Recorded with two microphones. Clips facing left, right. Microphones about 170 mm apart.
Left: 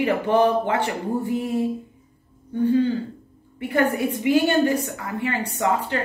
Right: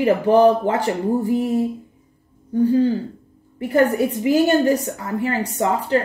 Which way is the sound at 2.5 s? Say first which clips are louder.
Right 3 dB; 35° right (ahead or behind).